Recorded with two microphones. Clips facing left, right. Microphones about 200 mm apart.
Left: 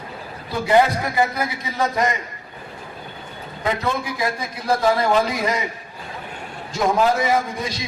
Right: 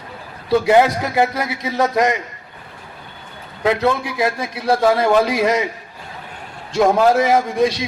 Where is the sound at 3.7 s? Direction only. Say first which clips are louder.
Right 6 dB; 70° right (ahead or behind).